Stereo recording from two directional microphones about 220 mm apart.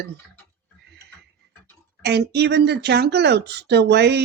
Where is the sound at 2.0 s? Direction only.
45° right (ahead or behind).